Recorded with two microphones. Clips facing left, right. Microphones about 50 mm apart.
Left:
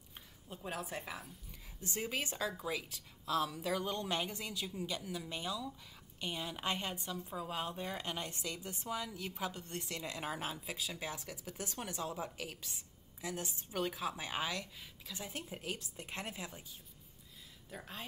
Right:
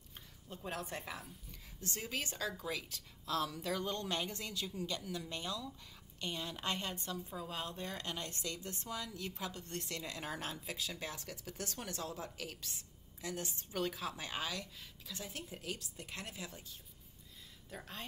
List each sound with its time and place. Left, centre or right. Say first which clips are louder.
0.5 s a woman's voice: even; centre
15.8 s a woman's voice: left 3 dB; left
17.6 s a woman's voice: even; centre